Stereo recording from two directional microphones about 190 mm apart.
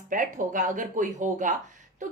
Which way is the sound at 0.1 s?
45° right (ahead or behind).